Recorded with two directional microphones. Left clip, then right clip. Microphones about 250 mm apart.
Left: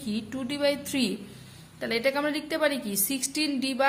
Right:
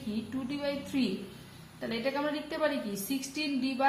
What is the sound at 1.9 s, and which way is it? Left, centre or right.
A woman's voice, left.